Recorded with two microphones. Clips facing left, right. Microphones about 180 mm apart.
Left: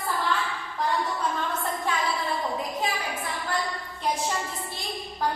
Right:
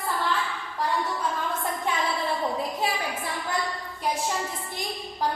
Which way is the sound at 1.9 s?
20° right (ahead or behind).